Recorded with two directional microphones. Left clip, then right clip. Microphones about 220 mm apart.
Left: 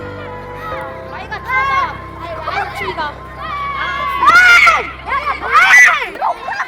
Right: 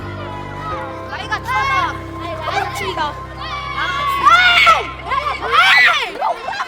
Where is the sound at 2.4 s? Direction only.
45° right (ahead or behind).